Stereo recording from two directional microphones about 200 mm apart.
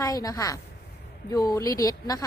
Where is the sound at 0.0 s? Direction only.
20° left (ahead or behind).